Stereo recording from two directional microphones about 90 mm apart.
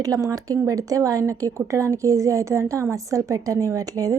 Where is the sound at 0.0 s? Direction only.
40° right (ahead or behind).